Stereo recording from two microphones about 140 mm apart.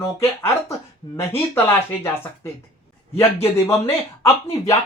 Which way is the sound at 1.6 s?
15° left (ahead or behind).